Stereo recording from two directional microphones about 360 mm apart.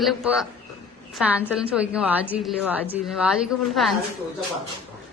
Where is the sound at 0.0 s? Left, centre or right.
Centre.